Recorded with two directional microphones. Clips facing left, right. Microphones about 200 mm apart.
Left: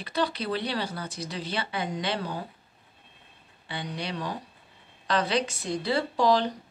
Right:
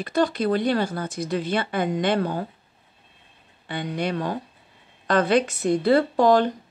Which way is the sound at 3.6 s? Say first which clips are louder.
Right 8 dB; 50° right (ahead or behind).